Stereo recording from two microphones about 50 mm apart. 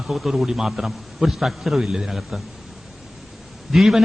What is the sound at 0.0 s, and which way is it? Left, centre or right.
A man's voice, centre.